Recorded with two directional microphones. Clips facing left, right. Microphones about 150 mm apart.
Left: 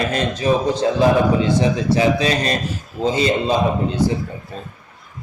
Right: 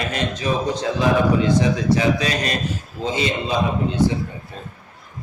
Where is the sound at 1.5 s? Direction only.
30° left (ahead or behind).